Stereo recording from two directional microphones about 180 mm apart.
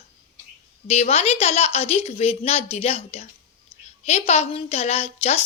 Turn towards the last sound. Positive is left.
turn(degrees=35)  # may be behind; listen again after turning